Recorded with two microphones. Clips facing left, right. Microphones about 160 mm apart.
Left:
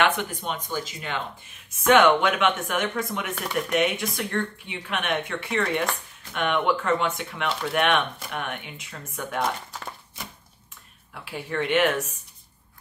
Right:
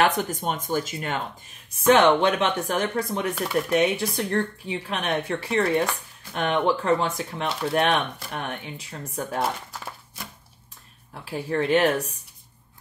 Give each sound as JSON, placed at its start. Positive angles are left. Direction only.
{"t": 0.0, "sound": "speech", "side_deg": -40}
{"t": 1.8, "sound": "speech", "side_deg": -30}
{"t": 9.7, "sound": "speech", "side_deg": -5}
{"t": 11.1, "sound": "speech", "side_deg": -40}